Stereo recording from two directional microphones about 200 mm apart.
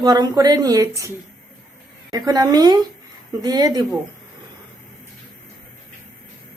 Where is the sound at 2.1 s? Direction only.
20° right (ahead or behind).